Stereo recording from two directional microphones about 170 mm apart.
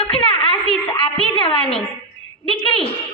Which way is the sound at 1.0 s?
30° left (ahead or behind).